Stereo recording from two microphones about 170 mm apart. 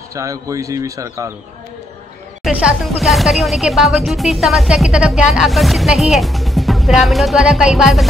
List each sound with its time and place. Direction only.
0.1 s speech: 20° right (ahead or behind)
3.0 s speech: centre (ahead or behind)